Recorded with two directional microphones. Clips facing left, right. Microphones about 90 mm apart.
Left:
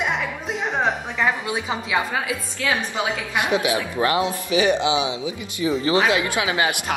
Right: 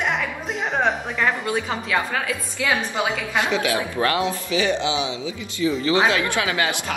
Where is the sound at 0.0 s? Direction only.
Centre (ahead or behind).